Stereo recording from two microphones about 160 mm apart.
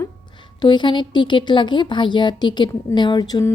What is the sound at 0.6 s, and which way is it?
Speech, 30° left (ahead or behind).